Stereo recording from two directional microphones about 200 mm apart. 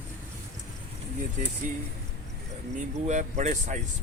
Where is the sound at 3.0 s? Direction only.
35° right (ahead or behind).